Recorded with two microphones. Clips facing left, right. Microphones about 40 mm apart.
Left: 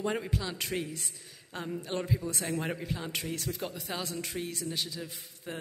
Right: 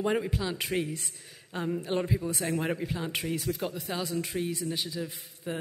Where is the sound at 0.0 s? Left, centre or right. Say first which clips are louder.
Right 4 dB; centre.